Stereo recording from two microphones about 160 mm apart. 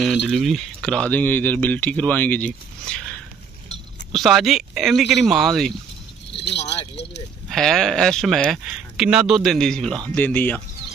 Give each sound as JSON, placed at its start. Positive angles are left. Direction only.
{"t": 0.0, "sound": "speech", "side_deg": 0}
{"t": 6.3, "sound": "keys jangling", "side_deg": 90}
{"t": 7.4, "sound": "speech", "side_deg": 0}